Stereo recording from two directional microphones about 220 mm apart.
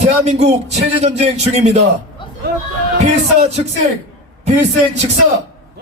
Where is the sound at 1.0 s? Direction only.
30° right (ahead or behind).